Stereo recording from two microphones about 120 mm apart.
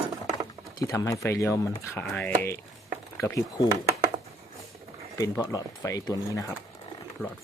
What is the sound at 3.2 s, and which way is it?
Speech, 25° left (ahead or behind).